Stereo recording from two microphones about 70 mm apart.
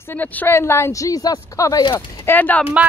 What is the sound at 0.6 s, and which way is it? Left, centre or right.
A woman's voice, left.